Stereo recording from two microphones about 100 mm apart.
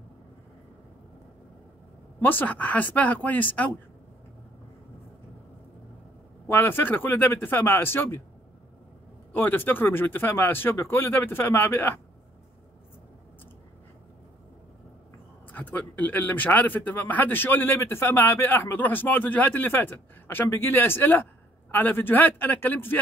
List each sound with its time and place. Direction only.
2.2 s speech: 15° left (ahead or behind)
6.4 s speech: 20° left (ahead or behind)
9.3 s speech: 20° left (ahead or behind)
15.5 s speech: 15° left (ahead or behind)